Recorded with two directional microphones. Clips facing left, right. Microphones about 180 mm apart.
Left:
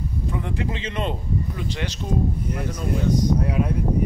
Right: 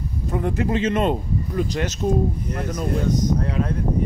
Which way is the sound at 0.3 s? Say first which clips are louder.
Right 8 dB; 45° right (ahead or behind).